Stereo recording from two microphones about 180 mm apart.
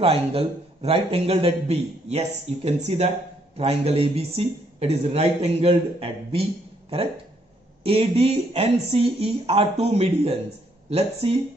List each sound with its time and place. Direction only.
0.0 s a man's voice: 30° right (ahead or behind)
7.8 s a man's voice: 30° right (ahead or behind)